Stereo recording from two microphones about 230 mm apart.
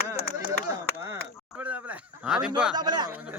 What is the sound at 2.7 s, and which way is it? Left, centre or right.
Speech, centre.